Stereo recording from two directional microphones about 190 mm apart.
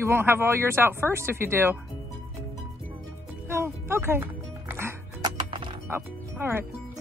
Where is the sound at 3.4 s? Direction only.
15° right (ahead or behind).